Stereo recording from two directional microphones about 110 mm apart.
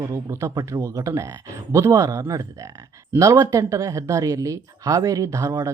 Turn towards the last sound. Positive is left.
turn(degrees=-30)  # may be behind; listen again after turning